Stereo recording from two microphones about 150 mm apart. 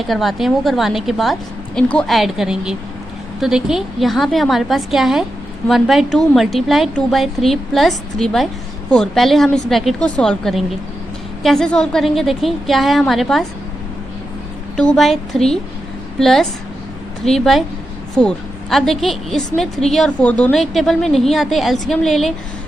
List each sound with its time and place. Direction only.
0.1 s a woman's voice: centre (ahead or behind)
14.8 s a woman's voice: 5° left (ahead or behind)